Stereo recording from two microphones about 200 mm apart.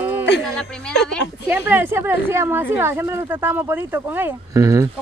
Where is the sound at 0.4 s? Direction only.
5° left (ahead or behind).